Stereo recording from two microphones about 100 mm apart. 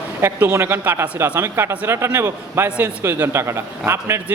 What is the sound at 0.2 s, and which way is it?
Speech, 20° right (ahead or behind).